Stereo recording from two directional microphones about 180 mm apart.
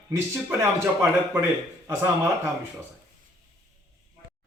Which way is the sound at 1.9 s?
15° right (ahead or behind).